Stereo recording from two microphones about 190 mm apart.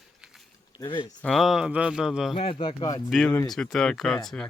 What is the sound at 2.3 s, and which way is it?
Speech, 30° left (ahead or behind).